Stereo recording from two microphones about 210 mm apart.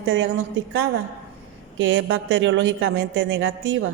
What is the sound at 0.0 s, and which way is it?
Speech, 65° right (ahead or behind).